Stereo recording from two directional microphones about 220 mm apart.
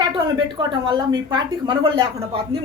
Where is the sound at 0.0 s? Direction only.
20° right (ahead or behind).